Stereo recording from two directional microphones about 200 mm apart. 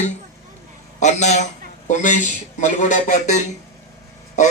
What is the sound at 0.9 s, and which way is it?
A man's voice, 35° left (ahead or behind).